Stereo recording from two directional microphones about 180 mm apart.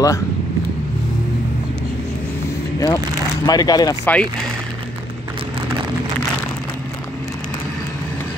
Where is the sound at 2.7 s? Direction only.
20° left (ahead or behind).